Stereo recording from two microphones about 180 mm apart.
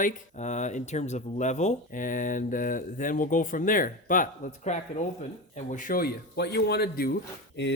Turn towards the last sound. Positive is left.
turn(degrees=65)  # may be behind; listen again after turning